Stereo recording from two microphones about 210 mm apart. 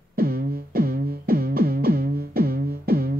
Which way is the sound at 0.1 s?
45° right (ahead or behind).